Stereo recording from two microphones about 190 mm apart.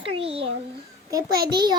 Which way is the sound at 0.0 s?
30° right (ahead or behind).